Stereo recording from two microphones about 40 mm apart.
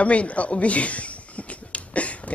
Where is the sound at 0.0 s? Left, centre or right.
Left.